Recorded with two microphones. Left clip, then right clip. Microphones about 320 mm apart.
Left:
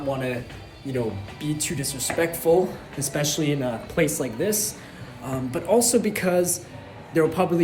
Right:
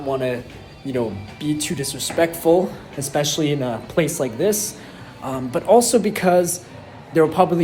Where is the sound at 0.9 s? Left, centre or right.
Centre.